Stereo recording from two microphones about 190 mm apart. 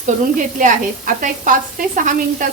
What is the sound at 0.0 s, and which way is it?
A woman's voice, 40° right (ahead or behind).